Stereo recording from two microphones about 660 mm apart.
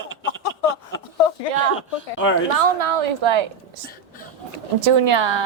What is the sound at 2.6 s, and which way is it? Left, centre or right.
Speech, right.